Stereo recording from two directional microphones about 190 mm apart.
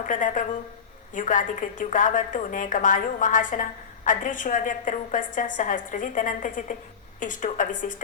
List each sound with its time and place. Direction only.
0.0 s a woman's voice: 45° left (ahead or behind)